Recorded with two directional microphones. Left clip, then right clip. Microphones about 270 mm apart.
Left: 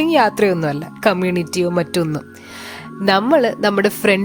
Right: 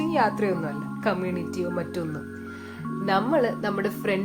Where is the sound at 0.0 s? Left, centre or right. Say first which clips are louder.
Left 10 dB; left.